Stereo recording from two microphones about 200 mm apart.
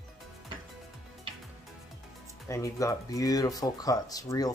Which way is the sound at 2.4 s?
15° left (ahead or behind).